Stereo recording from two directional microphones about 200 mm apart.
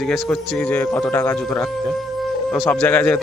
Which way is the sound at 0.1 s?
5° left (ahead or behind).